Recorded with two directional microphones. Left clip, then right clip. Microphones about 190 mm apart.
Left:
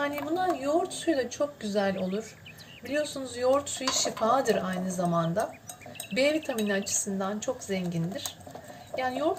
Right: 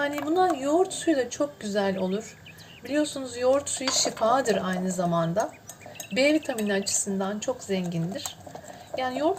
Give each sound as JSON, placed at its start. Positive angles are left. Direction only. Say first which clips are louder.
{"t": 0.0, "sound": "speech", "louder": "right 5 dB", "side_deg": -15}
{"t": 2.9, "sound": "speech", "louder": "right 3 dB", "side_deg": -10}